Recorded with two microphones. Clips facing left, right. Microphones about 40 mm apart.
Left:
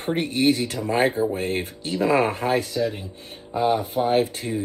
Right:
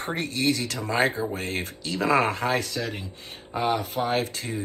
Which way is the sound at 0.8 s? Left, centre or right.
Right.